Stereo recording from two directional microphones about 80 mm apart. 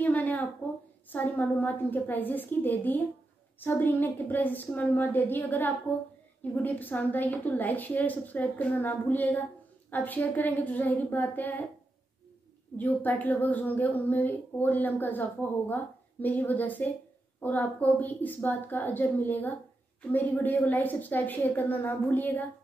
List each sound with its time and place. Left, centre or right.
0.0 s a sound: left
1.1 s a woman's voice: left
12.7 s a woman's voice: left